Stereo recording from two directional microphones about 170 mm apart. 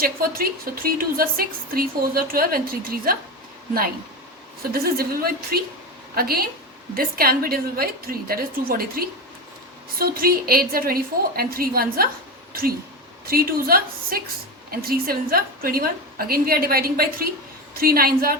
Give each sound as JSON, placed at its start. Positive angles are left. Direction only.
{"t": 0.0, "sound": "a woman's voice", "side_deg": -60}
{"t": 4.7, "sound": "a woman's voice", "side_deg": -60}
{"t": 13.2, "sound": "a woman's voice", "side_deg": -60}